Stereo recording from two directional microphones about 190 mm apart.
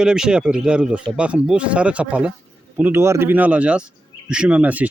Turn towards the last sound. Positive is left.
turn(degrees=-10)  # may be behind; listen again after turning